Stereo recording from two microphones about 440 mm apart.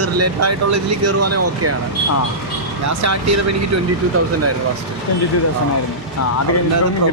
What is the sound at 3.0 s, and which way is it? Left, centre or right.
Speech, right.